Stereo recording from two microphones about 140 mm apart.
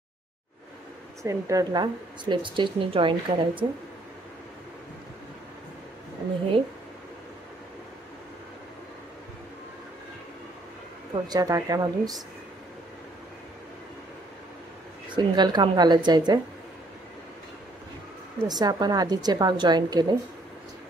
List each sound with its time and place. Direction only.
1.2 s speech: 25° right (ahead or behind)
11.2 s a woman's voice: 25° right (ahead or behind)
15.0 s speech: 30° right (ahead or behind)
18.5 s a woman's voice: 30° right (ahead or behind)